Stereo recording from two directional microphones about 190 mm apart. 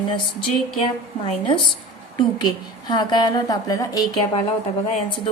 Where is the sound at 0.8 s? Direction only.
30° left (ahead or behind).